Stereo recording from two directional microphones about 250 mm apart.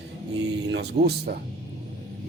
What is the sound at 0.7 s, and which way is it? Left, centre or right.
Speech, right.